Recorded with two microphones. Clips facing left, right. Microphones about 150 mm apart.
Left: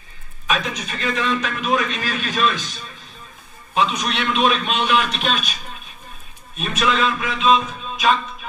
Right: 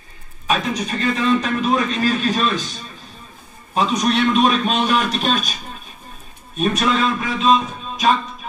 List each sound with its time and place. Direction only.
0.5 s a man's voice: 40° right (ahead or behind)
3.7 s a man's voice: 40° right (ahead or behind)
6.5 s a man's voice: 40° right (ahead or behind)